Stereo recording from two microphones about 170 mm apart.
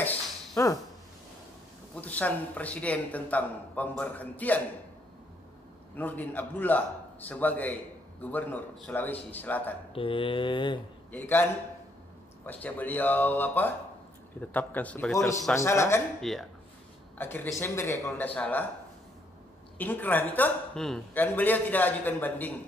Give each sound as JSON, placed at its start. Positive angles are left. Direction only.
{"t": 0.0, "sound": "cough", "side_deg": 15}
{"t": 2.0, "sound": "speech", "side_deg": 10}
{"t": 5.9, "sound": "speech", "side_deg": 10}
{"t": 9.9, "sound": "speech", "side_deg": 30}
{"t": 11.1, "sound": "speech", "side_deg": 10}
{"t": 16.2, "sound": "speech", "side_deg": 0}
{"t": 17.2, "sound": "speech", "side_deg": 10}
{"t": 19.8, "sound": "speech", "side_deg": 10}